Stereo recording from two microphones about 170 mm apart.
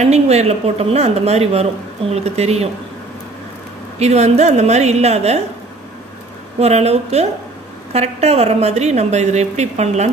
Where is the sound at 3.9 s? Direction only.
40° right (ahead or behind).